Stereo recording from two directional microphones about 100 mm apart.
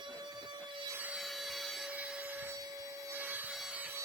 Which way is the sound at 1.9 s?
15° right (ahead or behind).